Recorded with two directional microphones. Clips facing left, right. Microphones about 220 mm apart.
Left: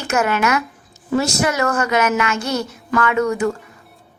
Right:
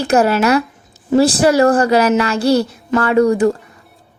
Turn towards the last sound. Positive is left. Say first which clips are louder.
# right 6 dB
turn(degrees=-35)  # may be behind; listen again after turning